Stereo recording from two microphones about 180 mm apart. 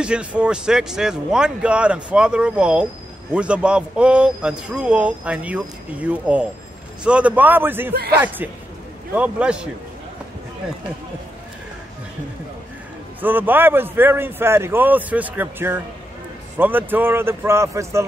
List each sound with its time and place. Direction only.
0.0 s a man's voice: 5° right (ahead or behind)
7.9 s speech: 60° right (ahead or behind)
8.4 s a man's voice: 10° right (ahead or behind)
13.2 s a man's voice: 10° right (ahead or behind)